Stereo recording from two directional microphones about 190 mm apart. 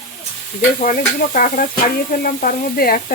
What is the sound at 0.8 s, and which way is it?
Sizzle, 45° left (ahead or behind).